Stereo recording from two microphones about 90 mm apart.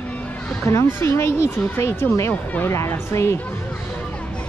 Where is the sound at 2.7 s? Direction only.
30° left (ahead or behind).